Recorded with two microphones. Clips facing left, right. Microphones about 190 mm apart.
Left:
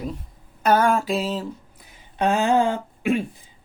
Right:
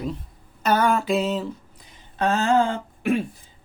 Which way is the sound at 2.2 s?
15° left (ahead or behind).